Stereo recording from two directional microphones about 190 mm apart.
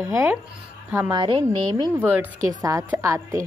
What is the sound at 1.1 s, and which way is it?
Speech, 25° right (ahead or behind).